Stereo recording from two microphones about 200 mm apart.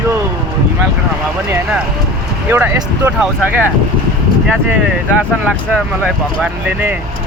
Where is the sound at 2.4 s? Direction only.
10° right (ahead or behind).